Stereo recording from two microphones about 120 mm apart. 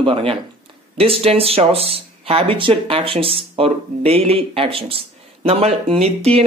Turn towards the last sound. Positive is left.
turn(degrees=-55)  # may be behind; listen again after turning